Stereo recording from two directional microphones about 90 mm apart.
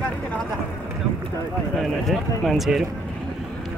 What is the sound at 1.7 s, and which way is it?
Speech, centre (ahead or behind).